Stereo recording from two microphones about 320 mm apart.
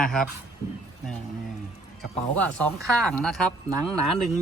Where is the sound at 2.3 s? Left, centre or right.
Centre.